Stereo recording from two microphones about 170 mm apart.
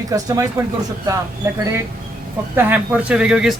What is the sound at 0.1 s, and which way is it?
Speech, 20° right (ahead or behind).